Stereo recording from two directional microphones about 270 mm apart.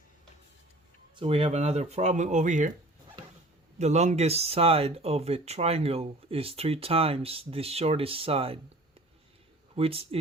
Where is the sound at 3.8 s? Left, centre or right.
Right.